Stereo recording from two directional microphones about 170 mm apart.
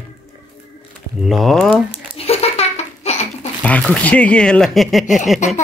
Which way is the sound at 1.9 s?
35° left (ahead or behind).